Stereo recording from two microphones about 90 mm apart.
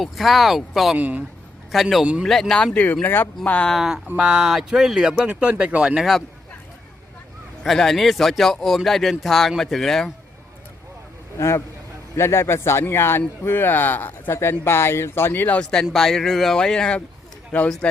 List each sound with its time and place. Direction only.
0.0 s speech: centre (ahead or behind)
0.9 s speech: 20° right (ahead or behind)
1.7 s speech: centre (ahead or behind)
2.7 s speech: 20° left (ahead or behind)
3.7 s speech: 5° right (ahead or behind)
7.6 s speech: centre (ahead or behind)
11.3 s speech: 30° left (ahead or behind); by 17.8 s 10° left (ahead or behind)